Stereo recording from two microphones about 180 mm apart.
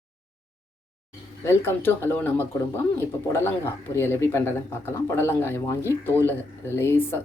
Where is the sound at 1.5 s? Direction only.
15° left (ahead or behind).